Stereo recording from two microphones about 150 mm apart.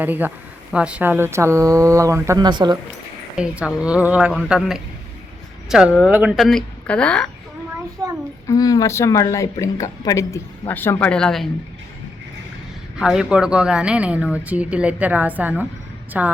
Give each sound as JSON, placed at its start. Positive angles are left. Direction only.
{"t": 0.0, "sound": "a woman's voice", "side_deg": -10}
{"t": 3.3, "sound": "a woman's voice", "side_deg": -5}
{"t": 6.3, "sound": "speech", "side_deg": 0}
{"t": 8.0, "sound": "a sound", "side_deg": -20}
{"t": 8.4, "sound": "speech", "side_deg": 25}
{"t": 13.0, "sound": "a woman's voice", "side_deg": -5}